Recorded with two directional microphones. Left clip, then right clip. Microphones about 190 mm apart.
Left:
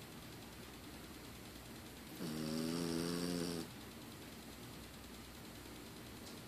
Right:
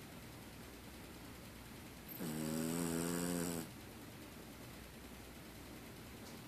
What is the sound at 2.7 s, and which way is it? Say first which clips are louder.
Vehicle: even; 25° right (ahead or behind).